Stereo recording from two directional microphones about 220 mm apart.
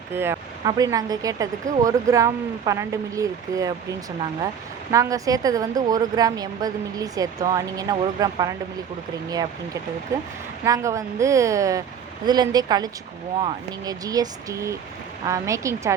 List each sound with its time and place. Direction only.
0.1 s a woman's voice: 10° right (ahead or behind)
4.9 s a woman's voice: 15° right (ahead or behind)
10.1 s a woman's voice: 15° right (ahead or behind)